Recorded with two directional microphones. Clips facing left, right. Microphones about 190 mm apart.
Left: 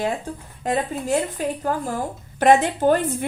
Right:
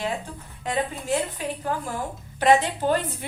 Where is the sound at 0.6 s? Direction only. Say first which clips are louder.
Left 4 dB; 45° left (ahead or behind).